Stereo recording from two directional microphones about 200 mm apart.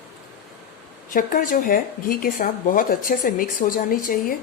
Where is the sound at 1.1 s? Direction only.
45° left (ahead or behind).